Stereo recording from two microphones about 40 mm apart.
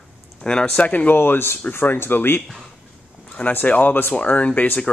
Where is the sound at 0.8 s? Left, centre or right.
Left.